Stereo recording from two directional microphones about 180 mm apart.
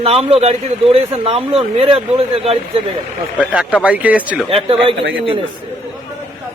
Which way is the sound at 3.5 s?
5° right (ahead or behind).